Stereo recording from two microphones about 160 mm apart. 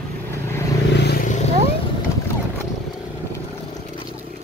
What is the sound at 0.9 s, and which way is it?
Vehicle, 90° left.